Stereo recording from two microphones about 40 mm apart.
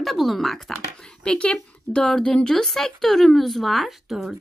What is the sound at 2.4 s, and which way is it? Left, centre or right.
Speech, centre.